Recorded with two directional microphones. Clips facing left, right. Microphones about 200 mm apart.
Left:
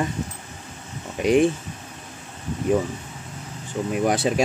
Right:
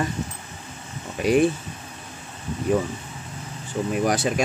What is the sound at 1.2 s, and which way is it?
Speech, 20° left (ahead or behind).